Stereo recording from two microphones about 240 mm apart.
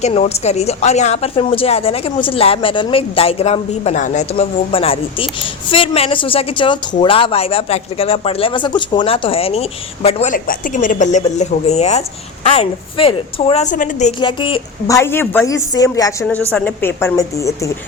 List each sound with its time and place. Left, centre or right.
0.0 s speech: left
14.2 s a woman's voice: left